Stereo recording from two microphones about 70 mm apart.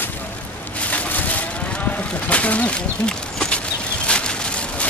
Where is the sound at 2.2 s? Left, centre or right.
Centre.